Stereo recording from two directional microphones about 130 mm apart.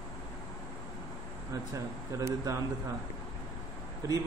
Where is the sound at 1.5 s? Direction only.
25° right (ahead or behind).